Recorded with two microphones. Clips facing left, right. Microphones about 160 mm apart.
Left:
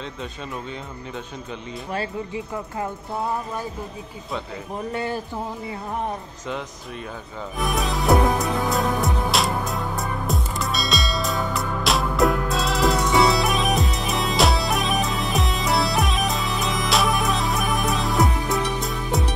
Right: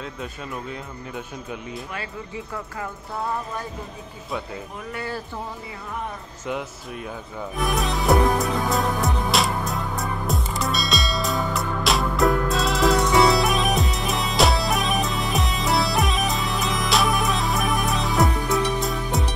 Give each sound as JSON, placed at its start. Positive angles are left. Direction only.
{"t": 0.0, "sound": "speech", "side_deg": -5}
{"t": 4.9, "sound": "speech", "side_deg": 20}
{"t": 7.5, "sound": "music", "side_deg": 0}